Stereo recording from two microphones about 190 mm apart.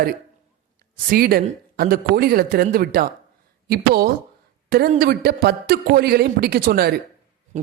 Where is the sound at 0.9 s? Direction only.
55° right (ahead or behind).